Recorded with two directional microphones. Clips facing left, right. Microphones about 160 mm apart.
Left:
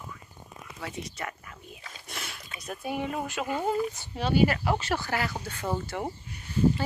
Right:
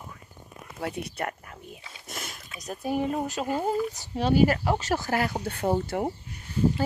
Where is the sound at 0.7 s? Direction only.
60° right (ahead or behind).